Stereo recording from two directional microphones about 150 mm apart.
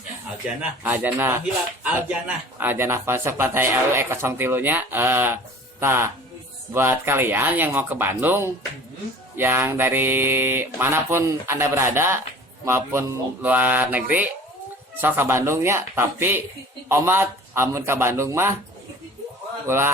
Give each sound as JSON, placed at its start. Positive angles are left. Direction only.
{"t": 0.4, "sound": "speech", "side_deg": -10}
{"t": 19.6, "sound": "speech", "side_deg": -15}